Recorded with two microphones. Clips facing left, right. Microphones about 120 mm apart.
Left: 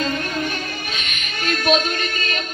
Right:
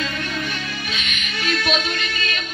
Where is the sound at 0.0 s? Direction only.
45° left (ahead or behind).